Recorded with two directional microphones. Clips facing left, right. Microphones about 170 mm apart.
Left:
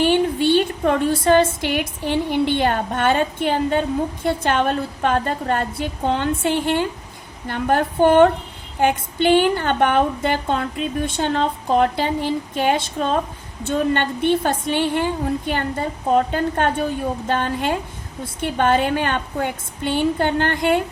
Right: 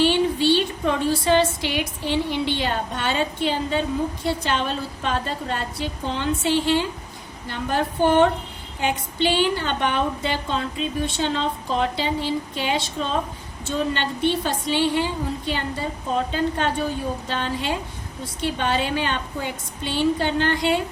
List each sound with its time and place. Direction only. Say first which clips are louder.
0.0 s a woman's voice: left 2 dB; 50° left (ahead or behind)